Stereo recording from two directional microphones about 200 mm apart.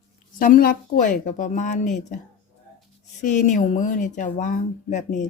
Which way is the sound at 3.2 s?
40° left (ahead or behind).